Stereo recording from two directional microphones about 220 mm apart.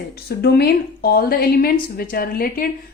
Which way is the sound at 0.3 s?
45° left (ahead or behind).